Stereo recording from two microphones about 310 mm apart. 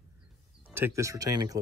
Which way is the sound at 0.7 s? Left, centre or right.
Centre.